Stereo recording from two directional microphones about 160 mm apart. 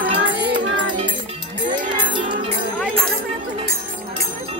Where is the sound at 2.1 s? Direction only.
30° right (ahead or behind).